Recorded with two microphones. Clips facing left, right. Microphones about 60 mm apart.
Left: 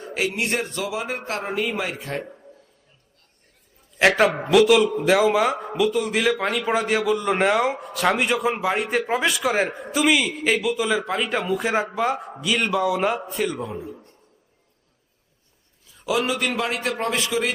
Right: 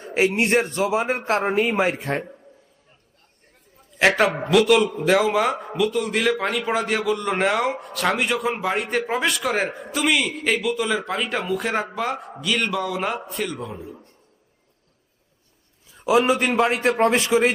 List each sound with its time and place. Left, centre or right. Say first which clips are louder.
0.4 s speech: right 5 dB; right
3.9 s a man's voice: left 1 dB; centre
16.0 s a man's voice: right 5 dB; right
16.8 s speech: right 6 dB; right